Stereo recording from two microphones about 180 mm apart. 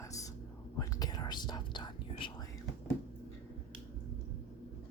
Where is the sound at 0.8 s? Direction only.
20° left (ahead or behind).